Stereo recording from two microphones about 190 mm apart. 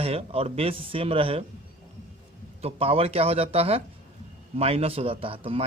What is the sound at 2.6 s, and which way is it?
Speech, 30° right (ahead or behind).